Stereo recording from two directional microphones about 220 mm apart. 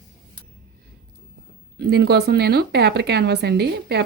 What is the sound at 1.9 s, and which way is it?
A woman's voice, 50° right (ahead or behind).